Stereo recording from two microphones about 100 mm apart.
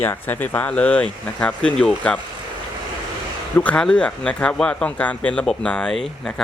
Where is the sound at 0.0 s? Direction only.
20° left (ahead or behind).